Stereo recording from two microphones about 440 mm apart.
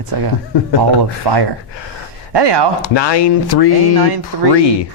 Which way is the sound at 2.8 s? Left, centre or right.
Left.